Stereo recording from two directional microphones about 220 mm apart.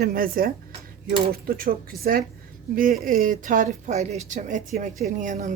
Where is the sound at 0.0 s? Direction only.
40° right (ahead or behind).